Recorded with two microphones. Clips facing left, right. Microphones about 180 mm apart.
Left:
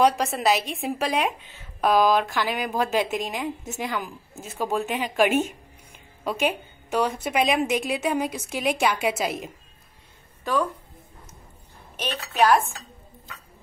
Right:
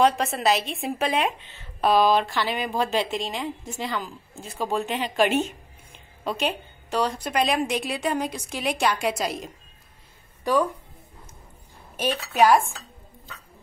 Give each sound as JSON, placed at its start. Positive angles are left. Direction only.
{"t": 0.0, "sound": "a woman's voice", "side_deg": 0}
{"t": 10.4, "sound": "a woman's voice", "side_deg": -15}
{"t": 12.0, "sound": "dishes", "side_deg": -10}